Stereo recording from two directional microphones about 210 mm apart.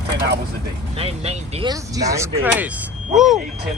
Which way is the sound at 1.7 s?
15° right (ahead or behind).